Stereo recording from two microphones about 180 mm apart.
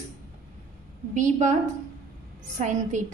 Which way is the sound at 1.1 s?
45° right (ahead or behind).